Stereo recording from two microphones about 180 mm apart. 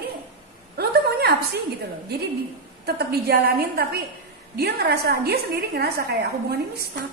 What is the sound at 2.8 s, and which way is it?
A woman's voice, 60° right (ahead or behind).